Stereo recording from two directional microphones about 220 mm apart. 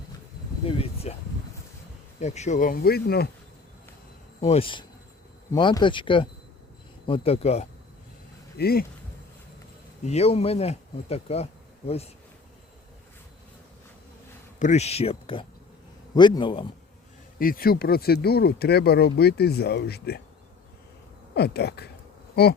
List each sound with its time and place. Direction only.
0.6 s speech: 25° left (ahead or behind)
2.2 s speech: 30° left (ahead or behind)
4.4 s a man's voice: 25° left (ahead or behind)
8.5 s speech: 45° left (ahead or behind)
10.0 s speech: 30° left (ahead or behind)
14.6 s speech: 30° left (ahead or behind)
17.3 s speech: 40° left (ahead or behind)
21.3 s speech: 45° left (ahead or behind)